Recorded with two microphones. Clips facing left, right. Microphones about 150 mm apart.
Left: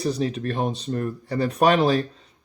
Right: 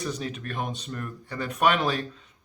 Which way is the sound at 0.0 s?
35° left (ahead or behind).